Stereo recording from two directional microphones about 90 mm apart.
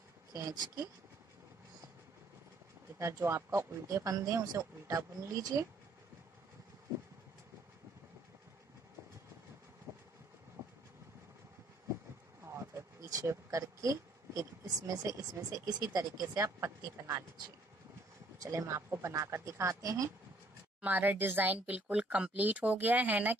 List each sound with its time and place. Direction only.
3.2 s a woman's voice: 30° right (ahead or behind)
9.9 s vehicle: 30° right (ahead or behind)
10.6 s train: 40° right (ahead or behind)
12.4 s a sound: 30° right (ahead or behind)
13.3 s a woman's voice: 35° right (ahead or behind)
18.4 s a woman's voice: 35° right (ahead or behind)
20.8 s speech: 20° right (ahead or behind)